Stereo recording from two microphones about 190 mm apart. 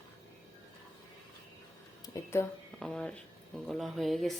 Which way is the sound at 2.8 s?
5° left (ahead or behind).